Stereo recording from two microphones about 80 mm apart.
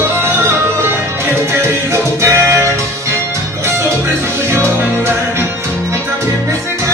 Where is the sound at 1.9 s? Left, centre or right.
Right.